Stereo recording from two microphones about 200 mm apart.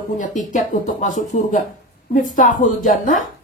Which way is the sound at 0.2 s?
40° left (ahead or behind).